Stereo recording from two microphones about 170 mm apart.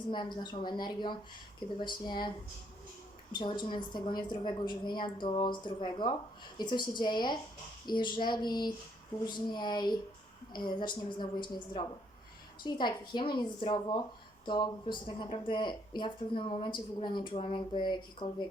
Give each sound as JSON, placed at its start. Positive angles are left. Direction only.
{"t": 0.1, "sound": "speech", "side_deg": 25}
{"t": 3.3, "sound": "speech", "side_deg": 25}